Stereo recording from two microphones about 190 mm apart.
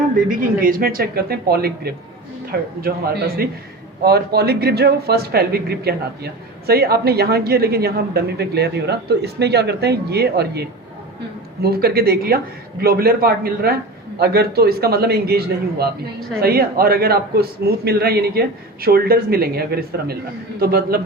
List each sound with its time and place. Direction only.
0.3 s speech: 50° right (ahead or behind)